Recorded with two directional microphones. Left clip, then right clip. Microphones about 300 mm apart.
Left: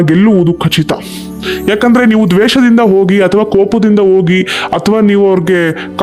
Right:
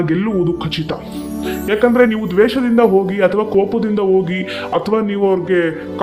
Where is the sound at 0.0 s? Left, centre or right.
Left.